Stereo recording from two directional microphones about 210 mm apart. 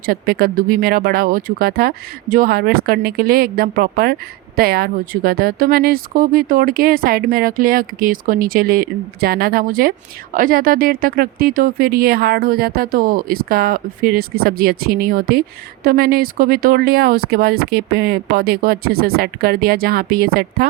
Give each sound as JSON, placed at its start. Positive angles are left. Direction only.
{"t": 0.0, "sound": "speech", "side_deg": -45}